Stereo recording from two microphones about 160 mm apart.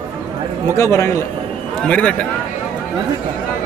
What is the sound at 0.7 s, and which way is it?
Speech, 20° left (ahead or behind).